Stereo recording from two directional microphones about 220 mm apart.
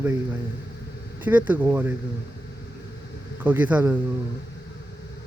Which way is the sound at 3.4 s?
10° right (ahead or behind).